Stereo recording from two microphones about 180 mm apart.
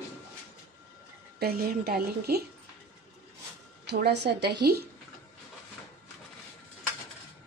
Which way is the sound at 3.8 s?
65° right (ahead or behind).